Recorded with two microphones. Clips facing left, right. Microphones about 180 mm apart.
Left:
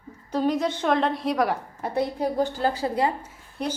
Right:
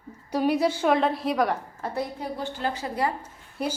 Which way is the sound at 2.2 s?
40° left (ahead or behind).